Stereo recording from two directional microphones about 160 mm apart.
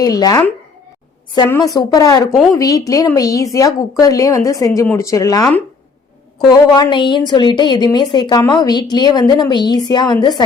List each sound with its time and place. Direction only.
0.0 s a woman's voice: 25° left (ahead or behind)
1.7 s a woman's voice: 20° left (ahead or behind)